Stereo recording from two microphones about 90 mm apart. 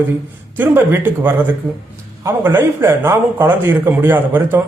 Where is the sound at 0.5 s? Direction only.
20° right (ahead or behind).